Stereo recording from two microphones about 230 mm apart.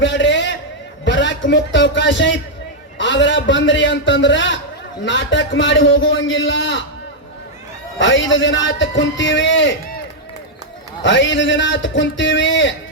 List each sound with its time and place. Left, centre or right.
0.0 s a sound: left
1.0 s a man's voice: left
7.9 s a man's voice: left
11.0 s a man's voice: left